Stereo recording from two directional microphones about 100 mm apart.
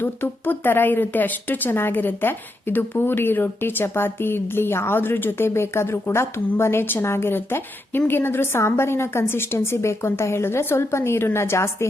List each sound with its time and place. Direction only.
0.0 s speech: 20° left (ahead or behind)